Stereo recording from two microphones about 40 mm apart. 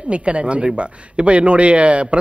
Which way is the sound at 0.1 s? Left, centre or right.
Right.